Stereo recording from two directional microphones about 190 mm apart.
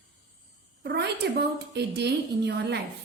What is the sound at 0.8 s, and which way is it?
A woman's voice, 60° right (ahead or behind).